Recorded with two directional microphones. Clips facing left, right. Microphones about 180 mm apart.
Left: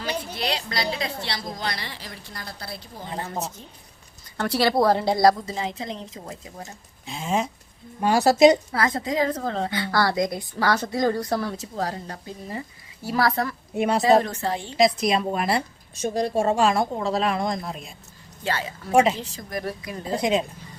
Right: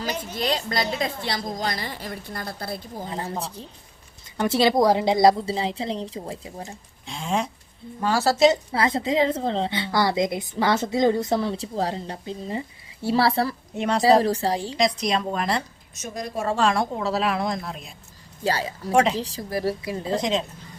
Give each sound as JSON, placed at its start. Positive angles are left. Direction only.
{"t": 0.3, "sound": "a woman's voice", "side_deg": -45}
{"t": 4.4, "sound": "a woman's voice", "side_deg": -20}
{"t": 7.0, "sound": "speech", "side_deg": 5}
{"t": 8.0, "sound": "speech", "side_deg": 15}
{"t": 8.7, "sound": "a woman's voice", "side_deg": -25}
{"t": 13.7, "sound": "speech", "side_deg": 10}
{"t": 14.0, "sound": "a woman's voice", "side_deg": -35}
{"t": 14.8, "sound": "speech", "side_deg": 5}
{"t": 16.0, "sound": "a woman's voice", "side_deg": 30}
{"t": 16.6, "sound": "a woman's voice", "side_deg": 5}
{"t": 18.4, "sound": "a woman's voice", "side_deg": -35}
{"t": 20.1, "sound": "speech", "side_deg": 10}